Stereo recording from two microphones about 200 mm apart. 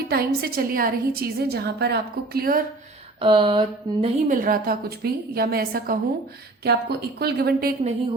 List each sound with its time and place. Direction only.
0.1 s a woman's voice: 50° right (ahead or behind)
3.2 s a sound: 25° right (ahead or behind)
4.3 s a woman's voice: 45° right (ahead or behind)